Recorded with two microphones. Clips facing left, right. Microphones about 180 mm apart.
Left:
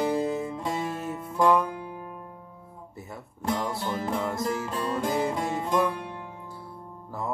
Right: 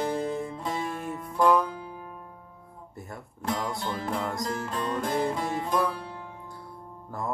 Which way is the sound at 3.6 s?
5° left (ahead or behind).